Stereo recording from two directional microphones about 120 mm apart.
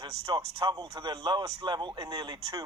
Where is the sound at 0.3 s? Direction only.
35° right (ahead or behind).